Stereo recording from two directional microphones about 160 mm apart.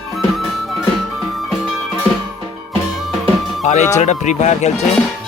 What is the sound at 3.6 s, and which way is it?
Speech, 45° left (ahead or behind).